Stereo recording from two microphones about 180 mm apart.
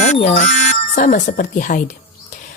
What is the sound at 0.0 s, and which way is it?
A woman's voice, 40° left (ahead or behind).